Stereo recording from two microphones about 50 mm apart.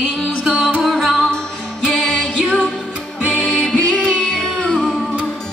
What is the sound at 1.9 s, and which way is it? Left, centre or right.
Music, centre.